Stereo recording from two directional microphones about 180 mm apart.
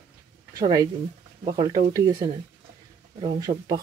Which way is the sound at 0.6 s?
20° right (ahead or behind).